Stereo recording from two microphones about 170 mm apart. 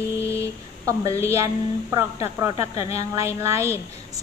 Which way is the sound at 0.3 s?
15° right (ahead or behind).